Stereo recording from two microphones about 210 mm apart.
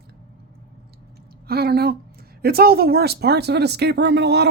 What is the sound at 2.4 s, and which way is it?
Speech, 45° right (ahead or behind).